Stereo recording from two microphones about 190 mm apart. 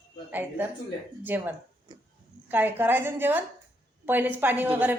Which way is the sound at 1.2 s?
10° right (ahead or behind).